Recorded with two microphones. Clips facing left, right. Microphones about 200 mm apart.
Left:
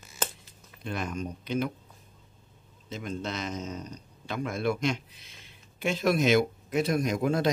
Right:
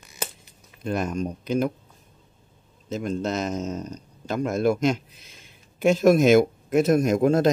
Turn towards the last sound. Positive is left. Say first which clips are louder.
# right 7 dB
turn(degrees=-45)  # may be behind; listen again after turning